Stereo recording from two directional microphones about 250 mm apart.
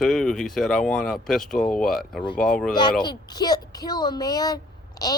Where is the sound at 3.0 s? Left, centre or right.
Centre.